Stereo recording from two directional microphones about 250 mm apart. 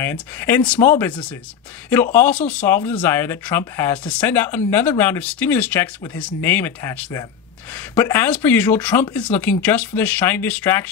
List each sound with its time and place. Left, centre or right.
0.0 s speech: centre